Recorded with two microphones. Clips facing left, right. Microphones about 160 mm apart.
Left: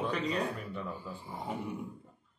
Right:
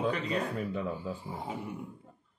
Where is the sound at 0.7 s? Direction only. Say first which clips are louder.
Right 5 dB; 90° right.